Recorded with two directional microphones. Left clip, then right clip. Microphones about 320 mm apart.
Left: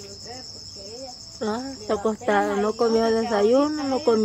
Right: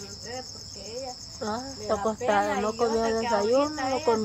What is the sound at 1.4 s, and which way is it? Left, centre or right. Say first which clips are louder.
Speech: left 4 dB; left.